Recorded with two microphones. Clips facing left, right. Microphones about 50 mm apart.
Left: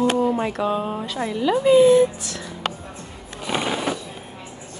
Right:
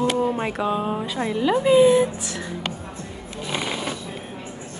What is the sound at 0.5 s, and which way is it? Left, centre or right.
Speech, centre.